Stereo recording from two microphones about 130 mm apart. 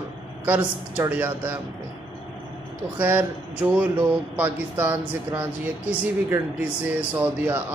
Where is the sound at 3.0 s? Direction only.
15° right (ahead or behind).